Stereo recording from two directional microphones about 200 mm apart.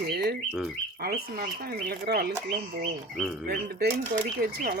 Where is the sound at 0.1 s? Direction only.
50° right (ahead or behind).